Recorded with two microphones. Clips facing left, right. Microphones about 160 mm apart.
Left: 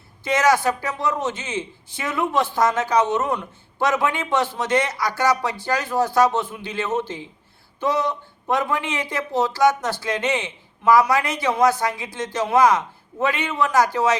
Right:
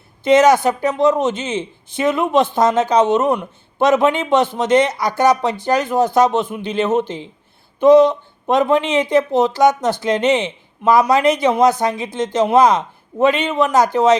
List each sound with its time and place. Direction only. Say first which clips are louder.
0.3 s speech: right 7 dB; 20° right (ahead or behind)